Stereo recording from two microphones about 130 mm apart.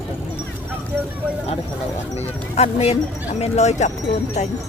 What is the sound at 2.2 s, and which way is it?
Speech, 55° left (ahead or behind).